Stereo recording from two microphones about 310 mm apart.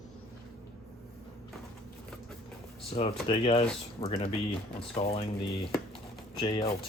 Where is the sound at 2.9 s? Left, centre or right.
Centre.